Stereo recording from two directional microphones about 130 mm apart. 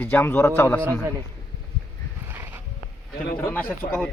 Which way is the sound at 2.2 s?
15° right (ahead or behind).